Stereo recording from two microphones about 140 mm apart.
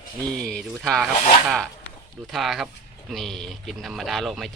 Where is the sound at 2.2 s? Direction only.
Centre (ahead or behind).